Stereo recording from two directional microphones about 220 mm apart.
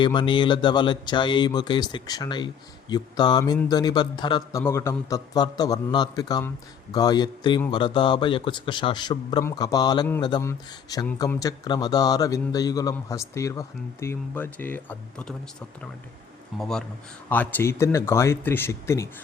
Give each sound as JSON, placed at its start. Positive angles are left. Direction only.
{"t": 0.0, "sound": "a man's voice", "side_deg": 20}
{"t": 16.6, "sound": "speech", "side_deg": 0}